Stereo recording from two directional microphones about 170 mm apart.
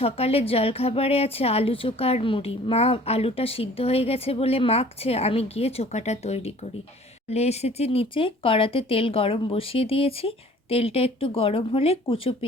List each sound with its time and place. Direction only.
0.0 s a woman's voice: 35° left (ahead or behind)